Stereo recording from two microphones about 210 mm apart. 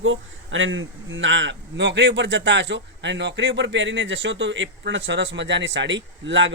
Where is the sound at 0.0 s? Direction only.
65° right (ahead or behind).